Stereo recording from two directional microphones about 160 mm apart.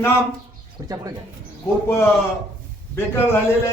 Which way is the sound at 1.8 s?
15° left (ahead or behind).